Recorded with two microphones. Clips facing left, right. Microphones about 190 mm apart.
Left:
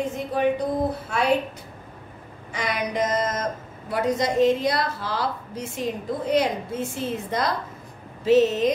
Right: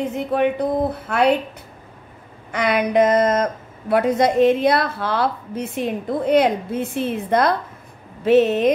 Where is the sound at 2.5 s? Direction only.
60° right (ahead or behind).